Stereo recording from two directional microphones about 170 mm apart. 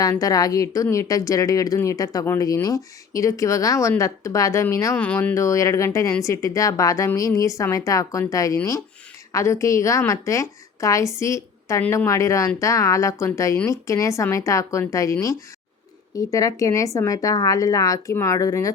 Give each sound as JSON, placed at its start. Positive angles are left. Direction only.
{"t": 0.0, "sound": "speech", "side_deg": 20}
{"t": 4.9, "sound": "a woman's voice", "side_deg": 10}